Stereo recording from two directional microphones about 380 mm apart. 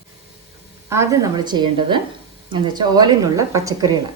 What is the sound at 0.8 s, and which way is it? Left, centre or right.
A woman's voice, centre.